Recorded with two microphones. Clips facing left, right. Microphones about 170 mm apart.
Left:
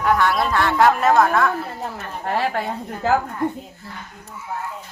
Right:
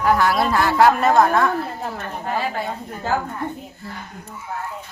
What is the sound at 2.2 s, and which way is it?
Speech, 70° left (ahead or behind).